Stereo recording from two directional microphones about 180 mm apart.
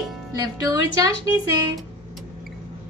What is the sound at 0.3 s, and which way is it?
Speech, 20° right (ahead or behind).